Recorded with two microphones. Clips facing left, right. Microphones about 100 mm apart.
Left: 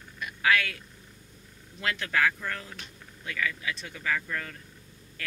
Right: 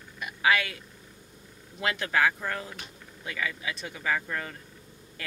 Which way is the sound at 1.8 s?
10° right (ahead or behind).